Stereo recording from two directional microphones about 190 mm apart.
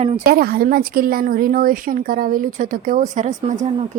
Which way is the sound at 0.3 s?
50° right (ahead or behind).